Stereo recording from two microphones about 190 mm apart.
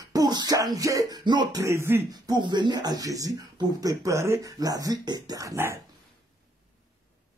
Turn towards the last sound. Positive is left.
turn(degrees=-15)  # may be behind; listen again after turning